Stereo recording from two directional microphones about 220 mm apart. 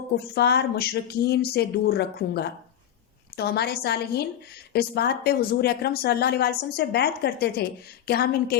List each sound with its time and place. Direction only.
0.3 s a woman's voice: 45° left (ahead or behind)